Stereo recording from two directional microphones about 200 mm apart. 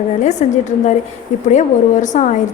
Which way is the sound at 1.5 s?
35° left (ahead or behind).